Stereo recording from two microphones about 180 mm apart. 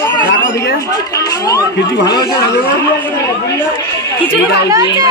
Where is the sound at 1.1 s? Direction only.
20° left (ahead or behind).